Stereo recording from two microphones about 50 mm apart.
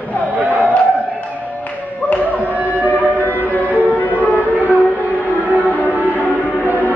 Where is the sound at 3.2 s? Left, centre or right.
Left.